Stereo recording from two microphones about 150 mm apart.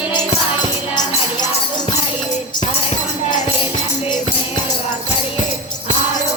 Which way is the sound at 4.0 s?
35° left (ahead or behind).